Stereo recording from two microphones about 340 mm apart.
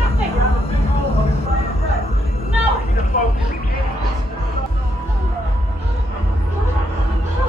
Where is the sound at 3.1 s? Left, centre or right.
Left.